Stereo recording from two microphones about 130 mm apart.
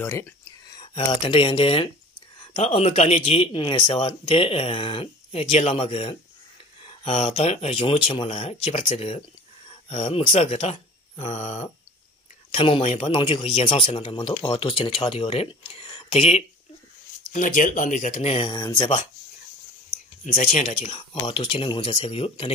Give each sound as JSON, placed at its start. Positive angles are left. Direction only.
{"t": 0.0, "sound": "speech", "side_deg": 20}
{"t": 0.9, "sound": "a man's voice", "side_deg": 45}
{"t": 2.3, "sound": "a sound", "side_deg": 40}
{"t": 2.6, "sound": "a man's voice", "side_deg": 50}
{"t": 12.4, "sound": "a man's voice", "side_deg": 45}
{"t": 17.3, "sound": "speech", "side_deg": 90}
{"t": 18.5, "sound": "speech", "side_deg": 30}
{"t": 20.2, "sound": "speech", "side_deg": 75}
{"t": 20.9, "sound": "a man's voice", "side_deg": 45}